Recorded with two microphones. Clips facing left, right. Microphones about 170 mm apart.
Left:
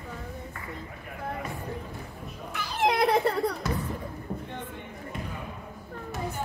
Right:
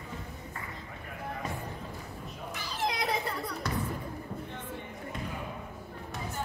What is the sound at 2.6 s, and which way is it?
Children playing, 60° left (ahead or behind).